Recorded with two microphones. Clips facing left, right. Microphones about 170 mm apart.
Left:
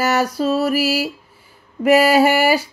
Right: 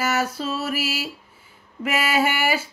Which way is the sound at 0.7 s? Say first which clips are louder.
Left 8 dB; 35° left (ahead or behind).